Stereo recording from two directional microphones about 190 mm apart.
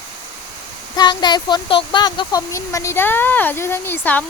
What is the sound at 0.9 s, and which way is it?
Speech, 20° left (ahead or behind).